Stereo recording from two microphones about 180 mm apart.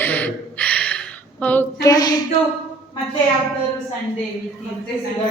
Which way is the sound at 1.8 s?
20° left (ahead or behind).